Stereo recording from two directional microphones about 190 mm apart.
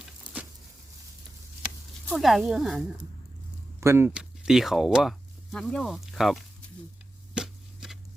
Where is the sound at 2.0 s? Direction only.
Centre (ahead or behind).